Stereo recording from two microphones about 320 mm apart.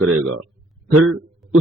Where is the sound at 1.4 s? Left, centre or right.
Centre.